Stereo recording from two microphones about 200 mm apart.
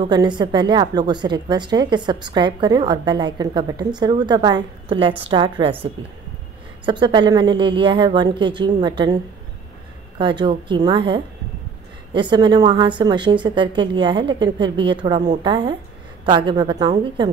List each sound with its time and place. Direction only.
0.0 s a woman's voice: 20° right (ahead or behind)
6.9 s a woman's voice: 25° right (ahead or behind)